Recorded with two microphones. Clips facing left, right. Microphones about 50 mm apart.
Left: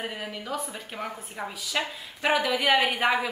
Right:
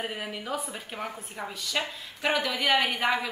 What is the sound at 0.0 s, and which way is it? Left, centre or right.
A woman's voice, centre.